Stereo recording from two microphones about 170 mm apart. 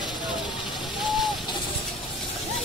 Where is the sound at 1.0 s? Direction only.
Centre (ahead or behind).